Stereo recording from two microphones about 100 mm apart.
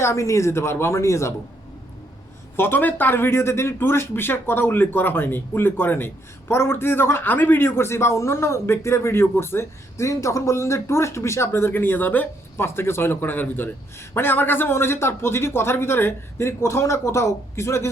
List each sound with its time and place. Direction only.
0.0 s a man's voice: 30° left (ahead or behind)
2.6 s a man's voice: 20° left (ahead or behind)